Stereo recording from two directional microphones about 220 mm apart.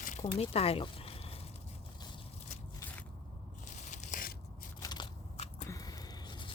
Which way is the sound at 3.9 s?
35° left (ahead or behind).